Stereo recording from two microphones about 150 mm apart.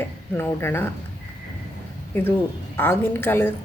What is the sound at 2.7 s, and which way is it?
Speech, 15° left (ahead or behind).